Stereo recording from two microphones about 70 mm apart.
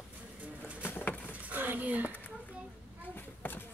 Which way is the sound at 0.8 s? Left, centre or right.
Left.